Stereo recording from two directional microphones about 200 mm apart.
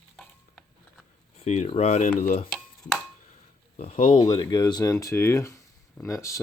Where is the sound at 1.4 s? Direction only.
35° left (ahead or behind).